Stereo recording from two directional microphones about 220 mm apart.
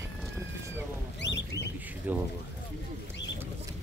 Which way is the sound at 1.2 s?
50° left (ahead or behind).